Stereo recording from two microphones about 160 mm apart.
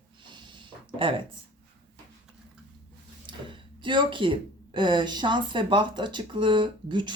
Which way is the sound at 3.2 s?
30° right (ahead or behind).